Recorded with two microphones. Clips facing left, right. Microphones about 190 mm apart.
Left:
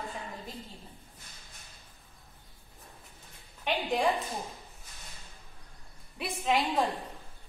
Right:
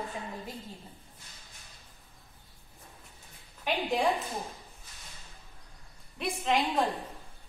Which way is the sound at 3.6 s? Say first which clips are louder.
Even; centre (ahead or behind).